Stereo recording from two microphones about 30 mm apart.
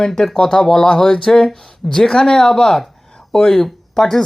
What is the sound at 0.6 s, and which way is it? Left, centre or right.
Speech, centre.